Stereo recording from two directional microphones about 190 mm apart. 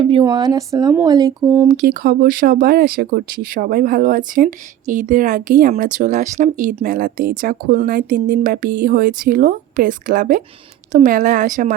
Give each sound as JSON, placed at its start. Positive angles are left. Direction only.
{"t": 0.0, "sound": "speech", "side_deg": -25}
{"t": 1.6, "sound": "speech", "side_deg": -40}